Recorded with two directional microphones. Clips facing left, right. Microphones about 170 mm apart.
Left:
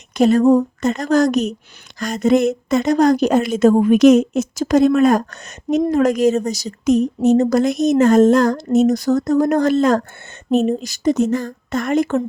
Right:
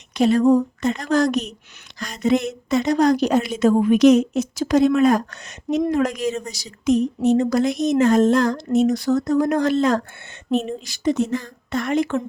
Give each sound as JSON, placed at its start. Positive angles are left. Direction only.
{"t": 0.1, "sound": "a woman's voice", "side_deg": 45}